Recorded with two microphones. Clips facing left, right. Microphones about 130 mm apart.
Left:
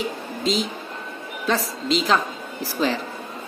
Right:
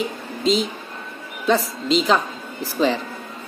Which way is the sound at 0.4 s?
Centre (ahead or behind).